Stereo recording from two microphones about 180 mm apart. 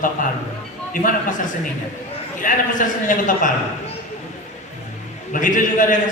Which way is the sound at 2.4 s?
45° left (ahead or behind).